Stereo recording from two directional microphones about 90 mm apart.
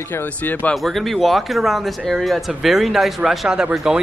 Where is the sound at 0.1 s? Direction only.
20° left (ahead or behind).